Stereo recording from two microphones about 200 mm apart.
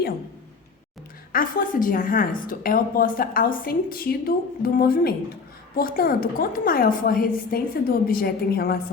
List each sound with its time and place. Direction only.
1.3 s a woman's voice: 45° left (ahead or behind)